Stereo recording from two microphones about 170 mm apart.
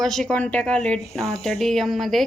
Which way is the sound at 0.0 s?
Centre (ahead or behind).